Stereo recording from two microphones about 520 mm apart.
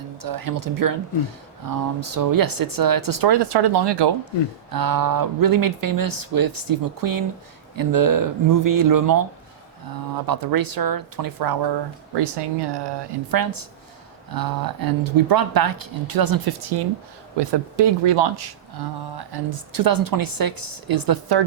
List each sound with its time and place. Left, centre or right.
0.2 s speech: right
10.2 s speech: right